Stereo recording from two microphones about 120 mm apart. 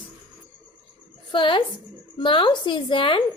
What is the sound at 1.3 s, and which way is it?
A woman's voice, 45° left (ahead or behind).